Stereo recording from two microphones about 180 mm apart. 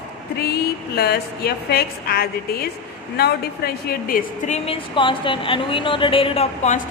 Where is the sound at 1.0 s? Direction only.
60° left (ahead or behind).